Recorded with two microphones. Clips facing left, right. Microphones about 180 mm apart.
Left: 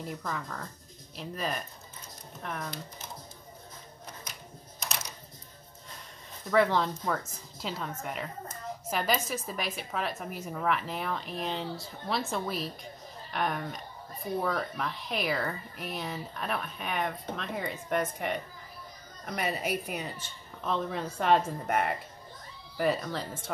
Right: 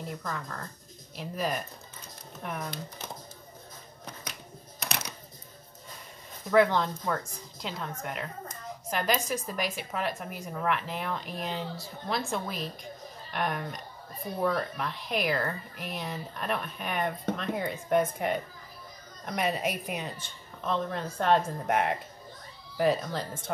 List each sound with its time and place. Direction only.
0.2 s speech: 5° left (ahead or behind)
4.7 s coin: 65° right (ahead or behind)
6.5 s speech: centre (ahead or behind)